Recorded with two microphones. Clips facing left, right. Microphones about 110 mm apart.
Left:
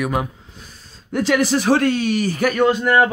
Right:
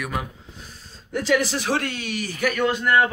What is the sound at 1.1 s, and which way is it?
Speech, 70° left (ahead or behind).